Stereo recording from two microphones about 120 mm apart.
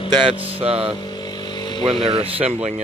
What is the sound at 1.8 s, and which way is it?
Speech, 50° right (ahead or behind).